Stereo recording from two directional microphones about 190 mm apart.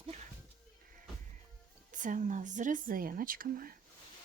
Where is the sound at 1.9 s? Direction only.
45° right (ahead or behind).